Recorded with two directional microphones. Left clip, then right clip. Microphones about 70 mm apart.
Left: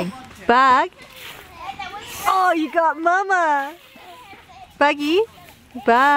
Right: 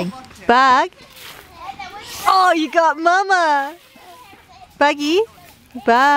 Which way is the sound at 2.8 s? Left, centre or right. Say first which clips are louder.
Right 3 dB; right.